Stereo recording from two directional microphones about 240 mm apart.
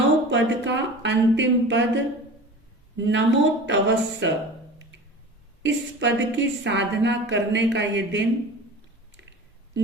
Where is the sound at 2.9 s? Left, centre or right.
Right.